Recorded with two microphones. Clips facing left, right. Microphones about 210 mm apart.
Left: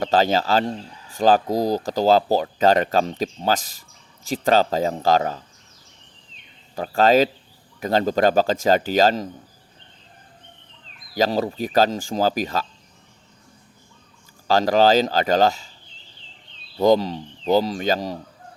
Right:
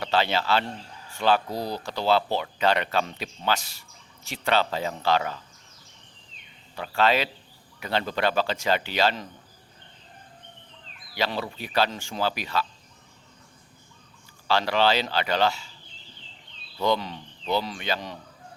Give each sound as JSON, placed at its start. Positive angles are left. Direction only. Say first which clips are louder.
{"t": 0.0, "sound": "speech", "louder": "left 6 dB", "side_deg": 45}
{"t": 6.7, "sound": "speech", "louder": "left 7 dB", "side_deg": 40}
{"t": 11.1, "sound": "speech", "louder": "left 8 dB", "side_deg": 40}
{"t": 14.4, "sound": "speech", "louder": "left 6 dB", "side_deg": 40}
{"t": 16.7, "sound": "speech", "louder": "left 8 dB", "side_deg": 40}